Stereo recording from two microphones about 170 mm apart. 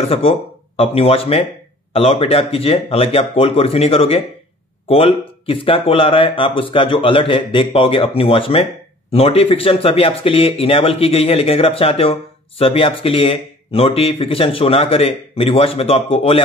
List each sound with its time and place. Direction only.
0.1 s speech: 35° left (ahead or behind)